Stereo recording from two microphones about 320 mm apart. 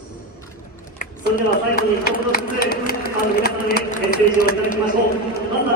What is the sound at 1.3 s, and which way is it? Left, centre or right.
Speech, left.